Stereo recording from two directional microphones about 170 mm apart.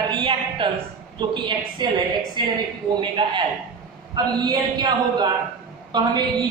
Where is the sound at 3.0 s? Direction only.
30° right (ahead or behind).